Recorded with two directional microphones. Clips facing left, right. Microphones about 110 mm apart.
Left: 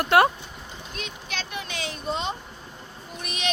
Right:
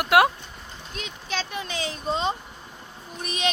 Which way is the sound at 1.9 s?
35° right (ahead or behind).